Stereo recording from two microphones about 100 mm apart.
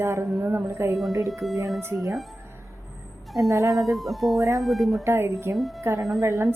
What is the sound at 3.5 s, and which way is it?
Speech, 35° right (ahead or behind).